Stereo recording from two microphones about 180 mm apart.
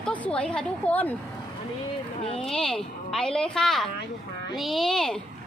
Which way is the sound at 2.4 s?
5° left (ahead or behind).